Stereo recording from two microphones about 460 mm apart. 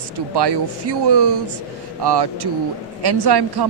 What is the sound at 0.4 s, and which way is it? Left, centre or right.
A woman's voice, right.